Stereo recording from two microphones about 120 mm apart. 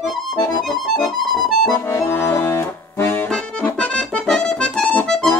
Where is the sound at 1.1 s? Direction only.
Centre (ahead or behind).